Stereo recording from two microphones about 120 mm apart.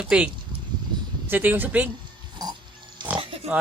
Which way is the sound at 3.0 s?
40° right (ahead or behind).